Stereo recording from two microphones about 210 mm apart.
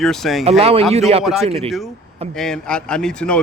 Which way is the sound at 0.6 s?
30° right (ahead or behind).